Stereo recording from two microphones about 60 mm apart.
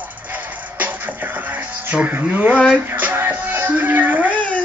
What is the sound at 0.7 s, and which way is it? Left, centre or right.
Music, right.